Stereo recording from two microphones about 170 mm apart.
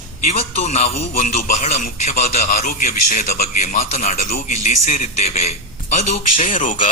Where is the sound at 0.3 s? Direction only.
40° left (ahead or behind).